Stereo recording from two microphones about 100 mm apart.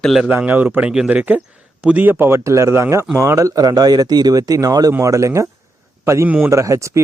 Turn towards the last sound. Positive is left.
turn(degrees=-30)  # may be behind; listen again after turning